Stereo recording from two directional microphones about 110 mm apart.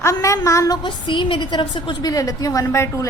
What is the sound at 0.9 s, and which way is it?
A woman's voice, 45° left (ahead or behind).